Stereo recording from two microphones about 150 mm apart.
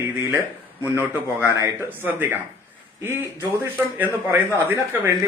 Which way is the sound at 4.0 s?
10° right (ahead or behind).